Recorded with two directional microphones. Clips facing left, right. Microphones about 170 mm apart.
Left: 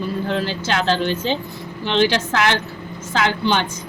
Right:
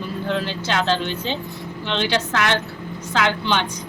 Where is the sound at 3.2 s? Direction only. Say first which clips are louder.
Left 2 dB; 40° left (ahead or behind).